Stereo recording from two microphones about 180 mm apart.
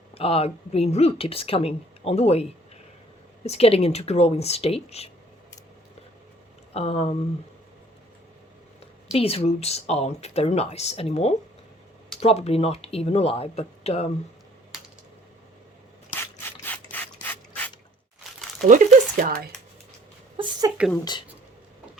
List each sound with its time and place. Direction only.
0.1 s a woman's voice: 30° left (ahead or behind)
6.7 s a woman's voice: 35° left (ahead or behind)
9.1 s a woman's voice: 35° left (ahead or behind)
16.4 s ratchet: 10° left (ahead or behind)
18.7 s speech: 50° right (ahead or behind)
20.3 s a sound: 25° right (ahead or behind)
21.0 s speech: 25° left (ahead or behind)